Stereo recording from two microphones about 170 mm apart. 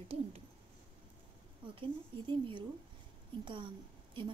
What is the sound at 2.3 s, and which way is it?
Speech, 30° right (ahead or behind).